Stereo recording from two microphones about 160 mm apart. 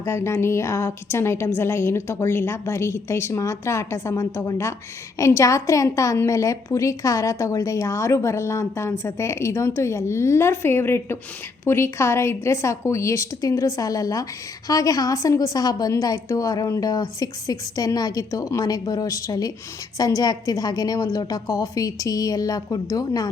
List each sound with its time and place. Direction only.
0.0 s a woman's voice: 15° left (ahead or behind)